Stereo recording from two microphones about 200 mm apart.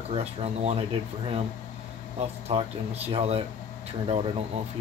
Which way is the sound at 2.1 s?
30° right (ahead or behind).